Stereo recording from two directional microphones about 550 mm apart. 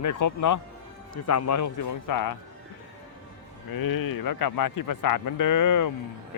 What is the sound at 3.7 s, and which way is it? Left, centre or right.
Speech, left.